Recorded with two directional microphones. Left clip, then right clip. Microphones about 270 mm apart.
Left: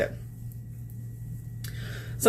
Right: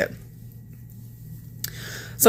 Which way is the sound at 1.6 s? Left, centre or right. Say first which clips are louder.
Right 7 dB; right.